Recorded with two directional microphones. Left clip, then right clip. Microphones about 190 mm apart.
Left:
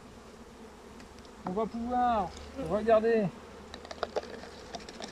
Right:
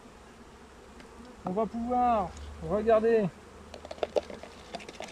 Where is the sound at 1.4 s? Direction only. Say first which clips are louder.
Right 2 dB; 10° right (ahead or behind).